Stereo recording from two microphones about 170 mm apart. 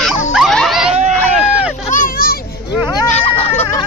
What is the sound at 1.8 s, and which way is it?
Children playing, 50° left (ahead or behind).